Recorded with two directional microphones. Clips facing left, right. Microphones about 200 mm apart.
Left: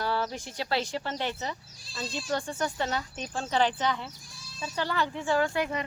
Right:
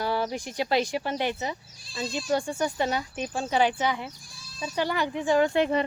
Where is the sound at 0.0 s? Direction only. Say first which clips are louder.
Right 3 dB; 15° right (ahead or behind).